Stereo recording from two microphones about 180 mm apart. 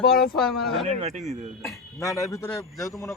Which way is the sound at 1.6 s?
20° left (ahead or behind).